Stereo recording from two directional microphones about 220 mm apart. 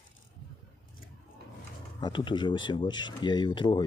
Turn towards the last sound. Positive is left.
turn(degrees=20)  # may be behind; listen again after turning